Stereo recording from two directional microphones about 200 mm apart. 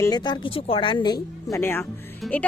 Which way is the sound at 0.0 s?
20° left (ahead or behind).